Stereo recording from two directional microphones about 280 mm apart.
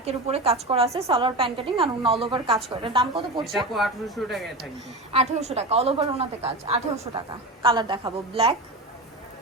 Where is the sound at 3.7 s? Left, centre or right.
Centre.